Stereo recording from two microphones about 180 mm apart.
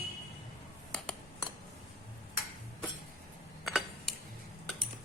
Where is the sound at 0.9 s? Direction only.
5° left (ahead or behind).